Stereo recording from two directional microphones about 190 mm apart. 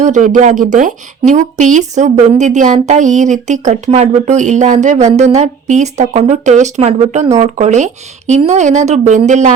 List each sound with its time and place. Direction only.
0.0 s speech: 40° right (ahead or behind)